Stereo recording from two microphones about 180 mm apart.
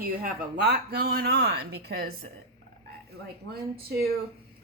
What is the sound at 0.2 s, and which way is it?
Speech, 60° right (ahead or behind).